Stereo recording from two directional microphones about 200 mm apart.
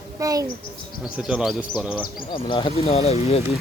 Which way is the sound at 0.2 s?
15° right (ahead or behind).